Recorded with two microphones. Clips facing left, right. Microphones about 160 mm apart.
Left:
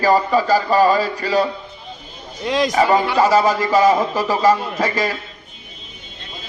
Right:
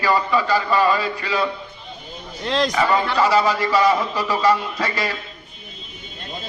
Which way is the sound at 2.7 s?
40° left (ahead or behind).